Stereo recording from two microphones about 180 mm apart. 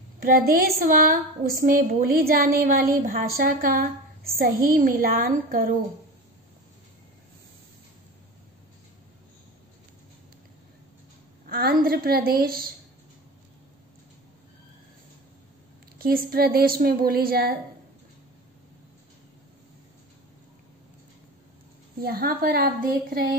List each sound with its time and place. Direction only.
0.2 s a woman's voice: 55° right (ahead or behind)
11.4 s a woman's voice: 55° right (ahead or behind)
16.0 s a woman's voice: 55° right (ahead or behind)
22.0 s a woman's voice: 55° right (ahead or behind)